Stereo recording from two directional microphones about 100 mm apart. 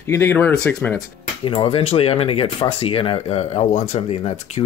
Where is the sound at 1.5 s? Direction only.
65° left (ahead or behind).